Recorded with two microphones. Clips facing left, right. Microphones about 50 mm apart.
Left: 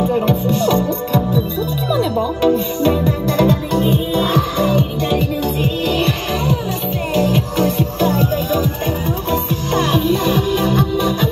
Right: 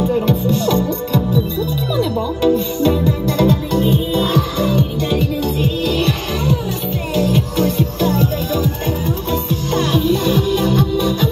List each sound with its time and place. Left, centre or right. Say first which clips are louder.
0.0 s music: even; left